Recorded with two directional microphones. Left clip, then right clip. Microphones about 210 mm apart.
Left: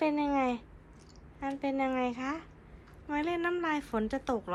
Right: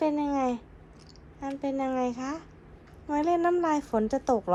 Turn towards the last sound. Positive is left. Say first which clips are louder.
# right 7 dB
turn(degrees=-20)  # may be behind; listen again after turning